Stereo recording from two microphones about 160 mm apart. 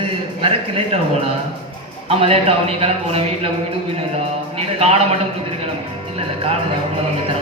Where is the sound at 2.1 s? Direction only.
35° right (ahead or behind).